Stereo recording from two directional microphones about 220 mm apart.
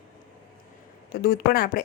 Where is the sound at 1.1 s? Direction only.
40° left (ahead or behind).